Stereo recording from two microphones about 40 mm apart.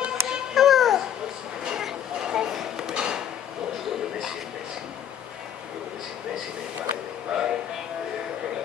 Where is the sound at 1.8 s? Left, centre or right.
Centre.